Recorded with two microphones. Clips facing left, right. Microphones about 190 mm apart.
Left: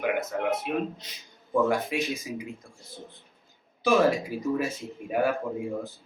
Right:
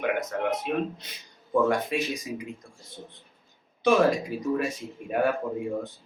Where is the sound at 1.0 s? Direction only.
55° right (ahead or behind).